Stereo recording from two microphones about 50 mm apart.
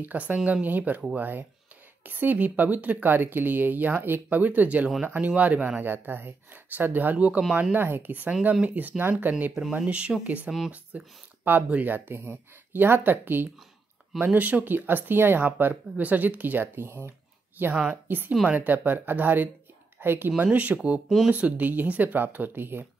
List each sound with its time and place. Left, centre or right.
0.0 s speech: right
5.8 s speech: right
7.2 s speech: right
7.7 s speech: right
8.3 s speech: right
8.6 s speech: right
9.6 s speech: centre
10.2 s speech: right
17.6 s speech: right
20.5 s speech: right